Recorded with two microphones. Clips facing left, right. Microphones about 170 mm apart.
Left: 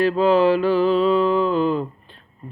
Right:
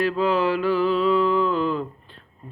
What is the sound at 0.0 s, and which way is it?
Mantra, 30° left (ahead or behind).